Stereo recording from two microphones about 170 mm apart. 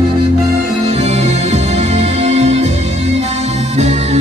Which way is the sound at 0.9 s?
40° right (ahead or behind).